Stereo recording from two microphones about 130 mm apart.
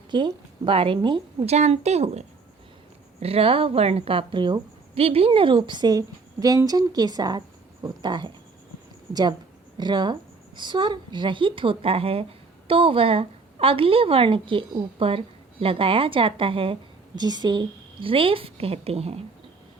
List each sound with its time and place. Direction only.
0.1 s speech: 35° right (ahead or behind)
1.5 s speech: 55° right (ahead or behind); by 8.3 s 35° right (ahead or behind)
9.7 s speech: 35° right (ahead or behind)
17.2 s speech: 35° right (ahead or behind); by 19.2 s 50° right (ahead or behind)